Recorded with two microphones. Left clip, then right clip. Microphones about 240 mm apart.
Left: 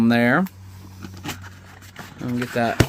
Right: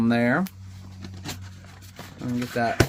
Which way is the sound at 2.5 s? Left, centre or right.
Left.